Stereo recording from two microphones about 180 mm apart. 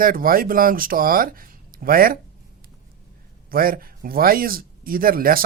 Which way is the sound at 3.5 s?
55° right (ahead or behind).